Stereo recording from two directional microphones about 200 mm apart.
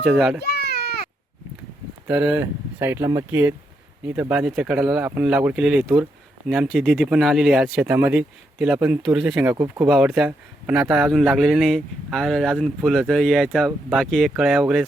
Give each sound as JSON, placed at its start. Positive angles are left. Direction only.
{"t": 0.0, "sound": "speech", "side_deg": 0}
{"t": 0.4, "sound": "a sound", "side_deg": 55}
{"t": 2.0, "sound": "speech", "side_deg": -5}